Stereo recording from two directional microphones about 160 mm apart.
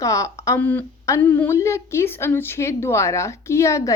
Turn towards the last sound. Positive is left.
turn(degrees=20)  # may be behind; listen again after turning